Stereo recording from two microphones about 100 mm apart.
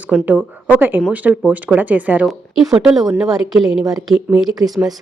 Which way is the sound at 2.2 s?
Centre (ahead or behind).